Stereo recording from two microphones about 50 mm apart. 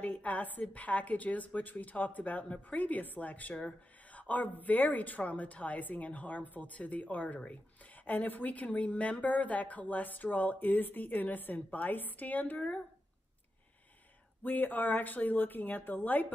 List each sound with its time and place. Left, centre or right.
0.0 s speech: left
14.4 s speech: left